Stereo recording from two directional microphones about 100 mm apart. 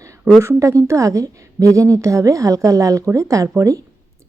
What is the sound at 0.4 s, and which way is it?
A woman's voice, 30° right (ahead or behind).